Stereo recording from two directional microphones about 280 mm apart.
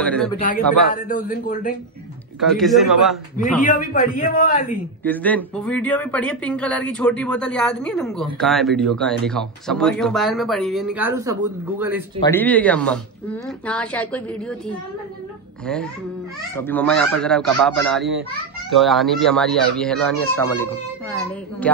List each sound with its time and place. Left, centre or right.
0.0 s a sound: centre
0.9 s a man's voice: left
2.5 s speech: centre
3.6 s a man's voice: left
5.0 s speech: centre
12.2 s speech: centre
15.6 s speech: centre